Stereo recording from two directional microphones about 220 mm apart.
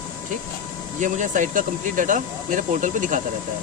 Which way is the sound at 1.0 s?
35° right (ahead or behind).